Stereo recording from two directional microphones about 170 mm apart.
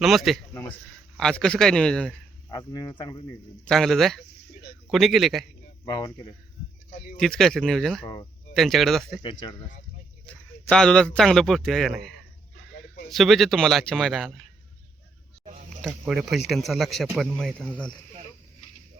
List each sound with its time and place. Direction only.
0.0 s a man's voice: centre (ahead or behind)
2.5 s speech: 20° left (ahead or behind)
3.7 s a man's voice: centre (ahead or behind)
5.8 s speech: 20° left (ahead or behind)
7.2 s a man's voice: centre (ahead or behind)
8.0 s speech: 20° left (ahead or behind)
8.5 s a man's voice: centre (ahead or behind)
9.2 s speech: 25° left (ahead or behind)
10.2 s a man's voice: 5° left (ahead or behind)
15.8 s a man's voice: centre (ahead or behind)